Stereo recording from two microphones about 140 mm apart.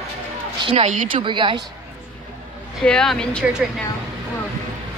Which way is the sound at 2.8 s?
5° left (ahead or behind).